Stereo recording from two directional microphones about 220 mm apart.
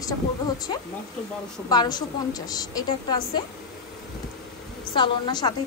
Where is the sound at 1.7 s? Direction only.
20° left (ahead or behind).